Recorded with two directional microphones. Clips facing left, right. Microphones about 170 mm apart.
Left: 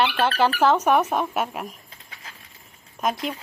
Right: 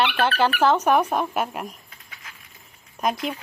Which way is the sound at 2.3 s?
30° left (ahead or behind).